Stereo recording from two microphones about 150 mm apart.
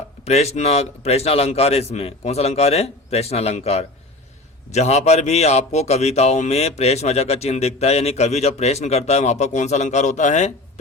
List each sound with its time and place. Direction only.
0.3 s a man's voice: 45° left (ahead or behind)